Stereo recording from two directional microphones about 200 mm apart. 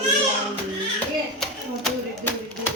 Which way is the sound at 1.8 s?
10° left (ahead or behind).